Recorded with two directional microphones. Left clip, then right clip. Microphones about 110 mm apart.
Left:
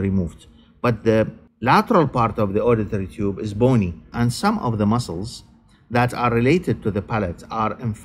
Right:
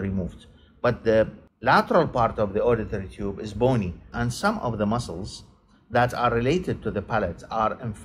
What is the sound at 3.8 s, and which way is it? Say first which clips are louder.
Speech: left 5 dB; 90° left.